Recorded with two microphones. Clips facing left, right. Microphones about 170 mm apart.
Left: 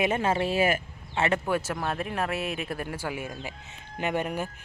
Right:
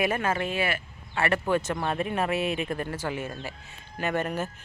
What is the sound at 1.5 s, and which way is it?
Speech, 5° left (ahead or behind).